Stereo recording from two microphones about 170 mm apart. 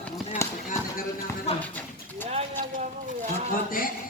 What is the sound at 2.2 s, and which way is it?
Speech, 40° right (ahead or behind).